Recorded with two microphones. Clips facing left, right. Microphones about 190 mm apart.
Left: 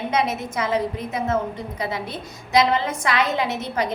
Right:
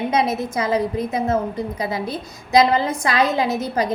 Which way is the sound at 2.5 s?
35° right (ahead or behind).